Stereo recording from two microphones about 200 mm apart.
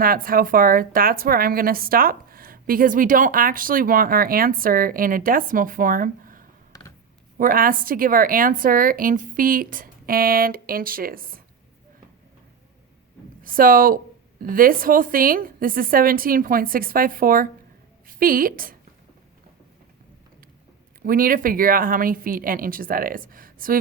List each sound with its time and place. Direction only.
0.0 s a woman's voice: 45° right (ahead or behind)
6.7 s a sound: 20° left (ahead or behind)
7.3 s a woman's voice: 45° right (ahead or behind)
13.4 s a woman's voice: 45° right (ahead or behind)
21.0 s a woman's voice: 45° right (ahead or behind)